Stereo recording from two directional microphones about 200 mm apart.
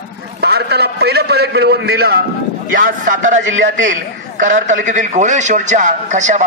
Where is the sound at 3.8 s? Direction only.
40° right (ahead or behind).